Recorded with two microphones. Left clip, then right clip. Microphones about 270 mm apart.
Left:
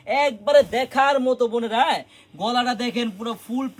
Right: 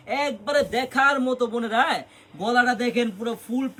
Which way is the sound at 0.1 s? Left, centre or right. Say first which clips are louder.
Left 6 dB; centre.